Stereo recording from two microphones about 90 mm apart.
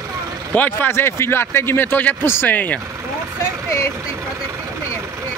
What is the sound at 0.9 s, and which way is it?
Speech, 30° left (ahead or behind).